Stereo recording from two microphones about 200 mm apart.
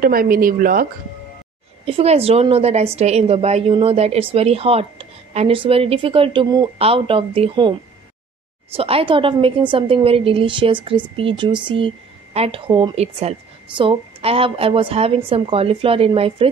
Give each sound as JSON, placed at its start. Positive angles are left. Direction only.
{"t": 0.0, "sound": "speech", "side_deg": -45}
{"t": 1.9, "sound": "a woman's voice", "side_deg": -30}
{"t": 8.7, "sound": "a woman's voice", "side_deg": -30}